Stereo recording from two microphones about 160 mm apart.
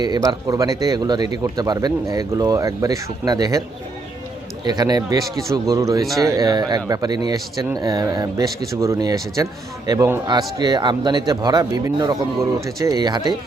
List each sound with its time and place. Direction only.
0.0 s a man's voice: 25° right (ahead or behind)
4.6 s a man's voice: 25° right (ahead or behind)
6.1 s speech: centre (ahead or behind)
6.3 s a man's voice: 25° right (ahead or behind)